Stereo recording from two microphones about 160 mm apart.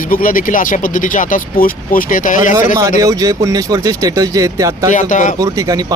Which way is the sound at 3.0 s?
20° right (ahead or behind).